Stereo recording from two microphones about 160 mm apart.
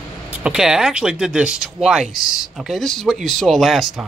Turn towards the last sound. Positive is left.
turn(degrees=0)  # may be behind; listen again after turning